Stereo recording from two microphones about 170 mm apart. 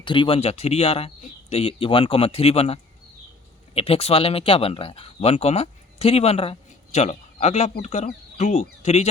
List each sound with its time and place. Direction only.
0.0 s speech: 30° left (ahead or behind)